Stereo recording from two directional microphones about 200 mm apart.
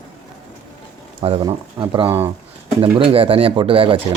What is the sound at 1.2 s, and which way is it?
Speech, 30° right (ahead or behind).